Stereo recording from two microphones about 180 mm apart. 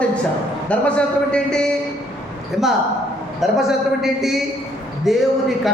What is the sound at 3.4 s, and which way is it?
A man's voice, centre (ahead or behind).